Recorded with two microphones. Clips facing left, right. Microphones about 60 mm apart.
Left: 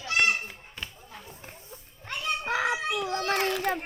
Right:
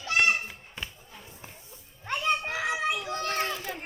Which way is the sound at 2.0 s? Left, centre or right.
Right.